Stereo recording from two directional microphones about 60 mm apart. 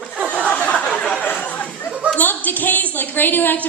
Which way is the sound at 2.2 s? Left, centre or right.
Left.